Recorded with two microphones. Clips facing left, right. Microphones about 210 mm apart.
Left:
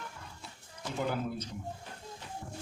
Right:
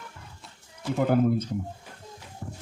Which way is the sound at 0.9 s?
55° right (ahead or behind).